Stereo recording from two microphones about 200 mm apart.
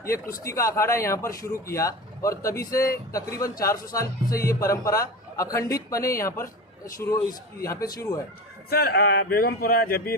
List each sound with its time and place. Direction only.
0.4 s a man's voice: 15° left (ahead or behind)
8.7 s speech: 55° left (ahead or behind)